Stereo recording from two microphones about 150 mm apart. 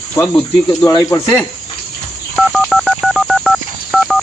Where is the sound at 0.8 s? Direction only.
20° left (ahead or behind).